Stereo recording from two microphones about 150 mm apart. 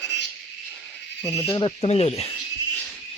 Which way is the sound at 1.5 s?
35° left (ahead or behind).